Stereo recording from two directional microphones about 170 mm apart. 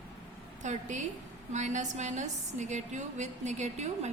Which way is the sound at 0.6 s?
45° right (ahead or behind).